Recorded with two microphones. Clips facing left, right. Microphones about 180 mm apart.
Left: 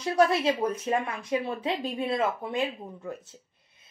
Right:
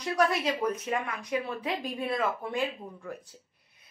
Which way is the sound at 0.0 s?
25° left (ahead or behind).